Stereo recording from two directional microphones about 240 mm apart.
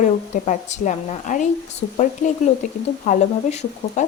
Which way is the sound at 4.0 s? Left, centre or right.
Left.